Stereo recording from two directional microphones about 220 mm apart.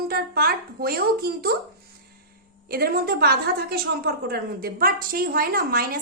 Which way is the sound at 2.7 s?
45° right (ahead or behind).